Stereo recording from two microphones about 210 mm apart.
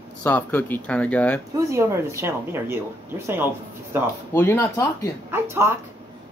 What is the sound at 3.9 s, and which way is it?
Speech, 10° right (ahead or behind).